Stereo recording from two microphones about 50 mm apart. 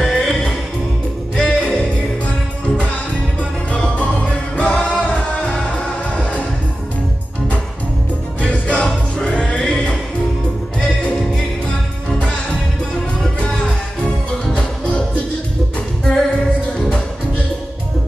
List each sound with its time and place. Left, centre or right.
0.0 s music: centre
3.9 s music: left
8.4 s music: left
14.4 s music: left
16.0 s music: centre